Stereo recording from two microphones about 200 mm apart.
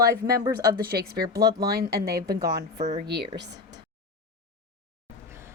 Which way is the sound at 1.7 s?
50° right (ahead or behind).